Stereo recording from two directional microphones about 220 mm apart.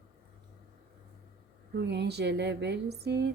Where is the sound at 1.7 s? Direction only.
50° right (ahead or behind).